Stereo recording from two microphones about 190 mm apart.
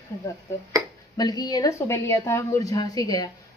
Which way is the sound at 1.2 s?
20° left (ahead or behind).